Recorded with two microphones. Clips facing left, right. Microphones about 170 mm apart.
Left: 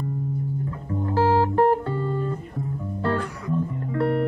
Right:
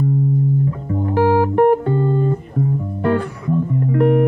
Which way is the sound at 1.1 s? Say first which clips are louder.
Right 5 dB; 15° right (ahead or behind).